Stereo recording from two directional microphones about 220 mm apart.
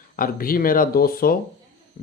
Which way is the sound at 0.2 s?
40° left (ahead or behind).